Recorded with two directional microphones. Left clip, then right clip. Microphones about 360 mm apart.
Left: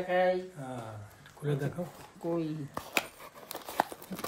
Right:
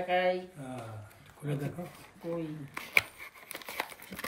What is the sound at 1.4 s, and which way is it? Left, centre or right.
Speech, centre.